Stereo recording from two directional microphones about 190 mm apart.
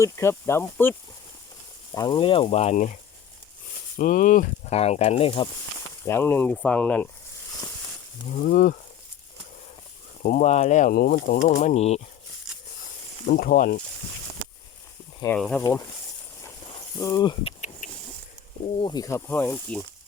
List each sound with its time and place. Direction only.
0.0 s speech: 15° left (ahead or behind)
1.9 s speech: 20° left (ahead or behind); by 2.9 s 35° left (ahead or behind)
3.9 s speech: 45° left (ahead or behind); by 5.5 s 30° left (ahead or behind)
6.1 s speech: 10° left (ahead or behind)
8.4 s speech: 45° left (ahead or behind)
10.2 s speech: 40° left (ahead or behind)
11.4 s speech: 40° left (ahead or behind)
13.2 s speech: 55° left (ahead or behind)
15.4 s speech: 5° left (ahead or behind)
17.0 s speech: 20° left (ahead or behind)
17.8 s a sound: 45° left (ahead or behind)
18.6 s speech: 25° left (ahead or behind); by 19.8 s 10° left (ahead or behind)